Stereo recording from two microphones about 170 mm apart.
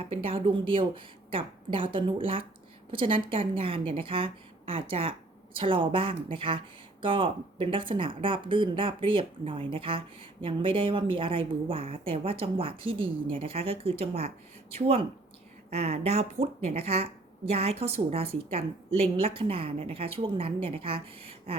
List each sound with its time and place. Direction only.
0.0 s speech: 35° right (ahead or behind)